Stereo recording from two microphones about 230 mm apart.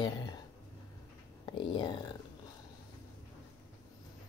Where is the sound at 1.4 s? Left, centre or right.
Left.